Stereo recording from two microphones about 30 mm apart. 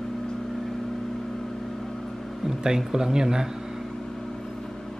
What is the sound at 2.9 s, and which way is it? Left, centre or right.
Speech, right.